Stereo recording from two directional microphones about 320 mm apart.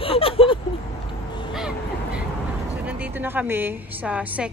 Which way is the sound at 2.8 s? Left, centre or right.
Centre.